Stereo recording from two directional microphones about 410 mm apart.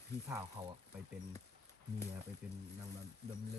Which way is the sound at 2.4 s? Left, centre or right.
Centre.